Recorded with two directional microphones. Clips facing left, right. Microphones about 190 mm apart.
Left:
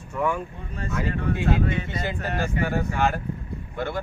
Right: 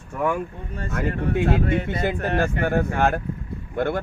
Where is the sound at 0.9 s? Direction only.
55° right (ahead or behind).